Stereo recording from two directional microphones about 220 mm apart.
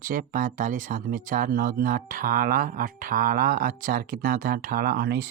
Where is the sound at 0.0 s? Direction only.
40° right (ahead or behind).